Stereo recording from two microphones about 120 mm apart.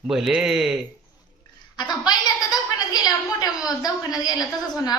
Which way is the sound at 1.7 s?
35° left (ahead or behind).